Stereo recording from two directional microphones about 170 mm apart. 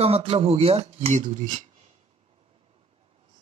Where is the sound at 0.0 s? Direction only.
35° right (ahead or behind).